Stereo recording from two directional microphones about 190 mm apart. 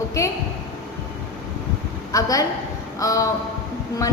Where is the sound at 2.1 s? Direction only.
20° left (ahead or behind).